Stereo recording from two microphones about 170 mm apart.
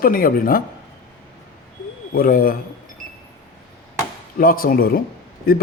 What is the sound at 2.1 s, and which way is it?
Speech, 55° left (ahead or behind).